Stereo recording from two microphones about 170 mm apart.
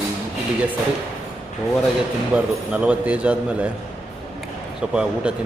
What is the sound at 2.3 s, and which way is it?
A man's voice, 5° right (ahead or behind).